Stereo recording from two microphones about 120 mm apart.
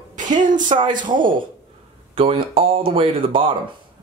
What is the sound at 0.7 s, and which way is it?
Speech, 55° right (ahead or behind).